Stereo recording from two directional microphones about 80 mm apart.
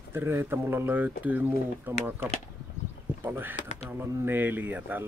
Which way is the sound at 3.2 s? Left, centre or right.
Right.